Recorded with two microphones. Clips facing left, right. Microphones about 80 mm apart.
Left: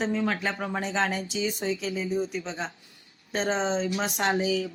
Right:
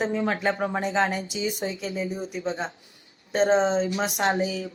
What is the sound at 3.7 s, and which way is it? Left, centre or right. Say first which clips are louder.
Speech: right 3 dB; right.